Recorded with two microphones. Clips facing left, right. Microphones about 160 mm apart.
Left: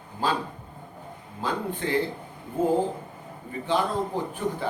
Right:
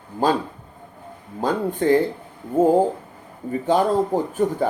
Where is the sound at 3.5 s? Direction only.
45° right (ahead or behind).